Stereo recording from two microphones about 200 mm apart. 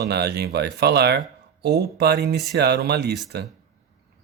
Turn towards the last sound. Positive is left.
turn(degrees=-55)  # may be behind; listen again after turning